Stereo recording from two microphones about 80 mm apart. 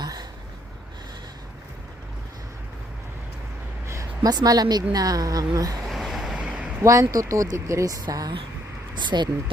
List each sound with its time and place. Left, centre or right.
0.0 s a sound: right
4.2 s a woman's voice: right
5.9 s vehicle: centre
6.8 s a woman's voice: right
9.0 s speech: right